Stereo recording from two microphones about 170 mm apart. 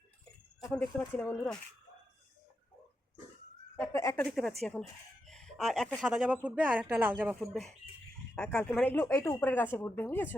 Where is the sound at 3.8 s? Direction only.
15° left (ahead or behind).